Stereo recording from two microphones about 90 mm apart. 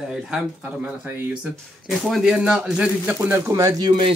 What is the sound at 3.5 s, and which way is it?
Speech, 40° right (ahead or behind).